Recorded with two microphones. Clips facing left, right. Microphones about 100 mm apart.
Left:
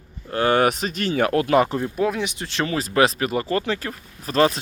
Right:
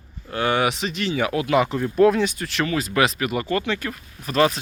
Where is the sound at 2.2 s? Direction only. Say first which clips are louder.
Right 2 dB; 20° left (ahead or behind).